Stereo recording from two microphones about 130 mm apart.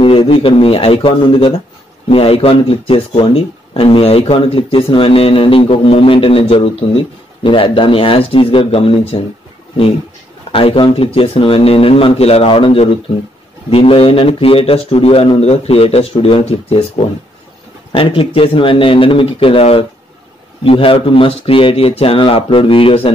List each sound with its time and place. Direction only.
0.0 s speech: 45° left (ahead or behind)
10.5 s speech: 45° left (ahead or behind)